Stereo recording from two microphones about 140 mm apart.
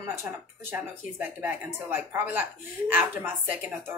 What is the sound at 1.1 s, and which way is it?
Speech, 15° right (ahead or behind).